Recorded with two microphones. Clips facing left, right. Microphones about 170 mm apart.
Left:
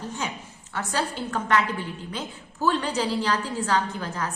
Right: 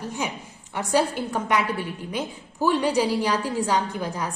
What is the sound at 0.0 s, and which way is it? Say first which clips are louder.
A woman's voice: right 2 dB; 10° right (ahead or behind).